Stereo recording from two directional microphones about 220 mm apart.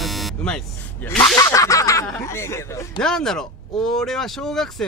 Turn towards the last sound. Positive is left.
turn(degrees=0)  # may be behind; listen again after turning